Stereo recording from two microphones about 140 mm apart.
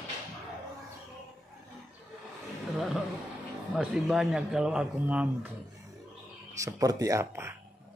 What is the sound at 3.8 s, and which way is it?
A man's voice, 5° right (ahead or behind).